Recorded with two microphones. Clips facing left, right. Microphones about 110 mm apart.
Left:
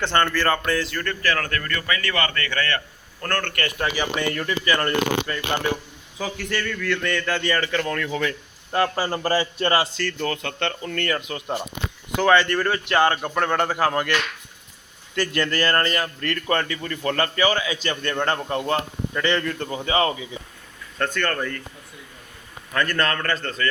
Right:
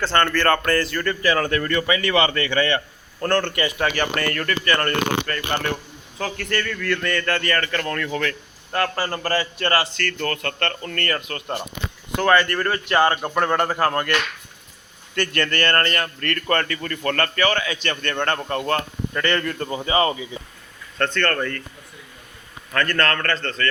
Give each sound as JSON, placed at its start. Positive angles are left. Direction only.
{"t": 0.0, "sound": "a man's voice", "side_deg": 15}
{"t": 0.3, "sound": "speech", "side_deg": 5}
{"t": 1.2, "sound": "a man's voice", "side_deg": -15}
{"t": 3.9, "sound": "a man's voice", "side_deg": 5}
{"t": 13.7, "sound": "a man's voice", "side_deg": 10}
{"t": 15.3, "sound": "a man's voice", "side_deg": 10}
{"t": 22.7, "sound": "a man's voice", "side_deg": 15}